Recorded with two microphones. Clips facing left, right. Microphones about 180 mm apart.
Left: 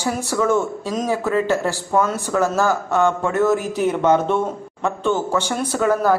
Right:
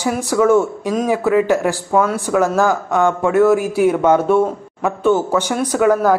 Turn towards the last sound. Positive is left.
turn(degrees=-10)  # may be behind; listen again after turning